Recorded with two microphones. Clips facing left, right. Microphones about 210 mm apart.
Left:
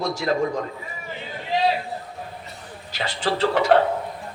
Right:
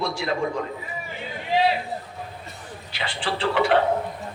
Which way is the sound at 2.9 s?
40° left (ahead or behind).